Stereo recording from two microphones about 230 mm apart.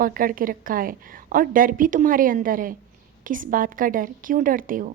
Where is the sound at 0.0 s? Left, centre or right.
Right.